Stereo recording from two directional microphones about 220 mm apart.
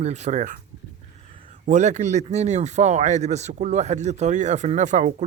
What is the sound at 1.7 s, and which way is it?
Speech, 35° right (ahead or behind).